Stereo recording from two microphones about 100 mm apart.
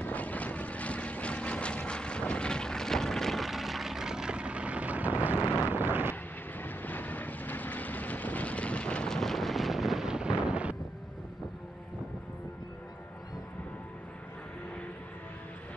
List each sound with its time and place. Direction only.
0.0 s vehicle: 15° left (ahead or behind); by 6.1 s 20° right (ahead or behind)
6.6 s vehicle: 20° left (ahead or behind); by 10.8 s 10° right (ahead or behind)